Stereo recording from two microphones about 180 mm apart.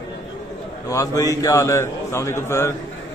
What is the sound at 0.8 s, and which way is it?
A man's voice, 20° left (ahead or behind).